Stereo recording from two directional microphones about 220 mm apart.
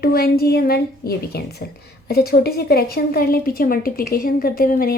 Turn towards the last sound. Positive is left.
turn(degrees=40)  # may be behind; listen again after turning